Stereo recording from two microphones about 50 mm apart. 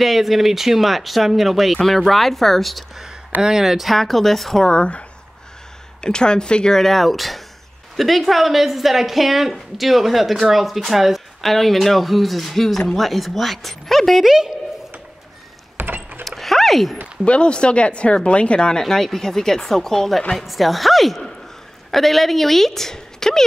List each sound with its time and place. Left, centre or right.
0.0 s speech: centre
3.4 s speech: centre
4.6 s speech: centre
15.8 s a sound: right
16.3 s a sound: centre
17.2 s speech: left